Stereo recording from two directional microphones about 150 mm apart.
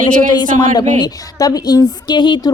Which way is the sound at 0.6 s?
30° left (ahead or behind).